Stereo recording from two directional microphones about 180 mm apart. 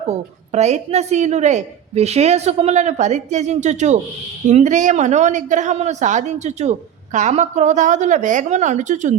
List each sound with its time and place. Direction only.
0.1 s a woman's voice: 40° right (ahead or behind)